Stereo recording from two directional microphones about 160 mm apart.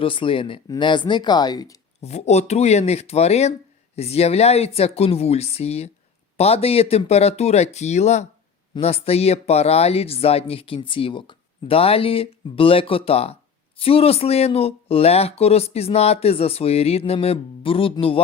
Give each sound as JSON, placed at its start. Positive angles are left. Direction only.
{"t": 0.0, "sound": "speech", "side_deg": 35}
{"t": 2.0, "sound": "speech", "side_deg": 45}